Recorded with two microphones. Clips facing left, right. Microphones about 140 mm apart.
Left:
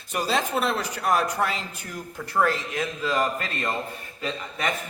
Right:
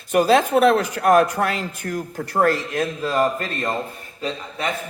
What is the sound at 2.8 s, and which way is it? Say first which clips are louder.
A man's voice: right 5 dB; 35° right (ahead or behind).